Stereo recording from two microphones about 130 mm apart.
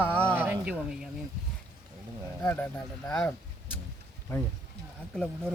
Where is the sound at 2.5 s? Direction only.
15° left (ahead or behind).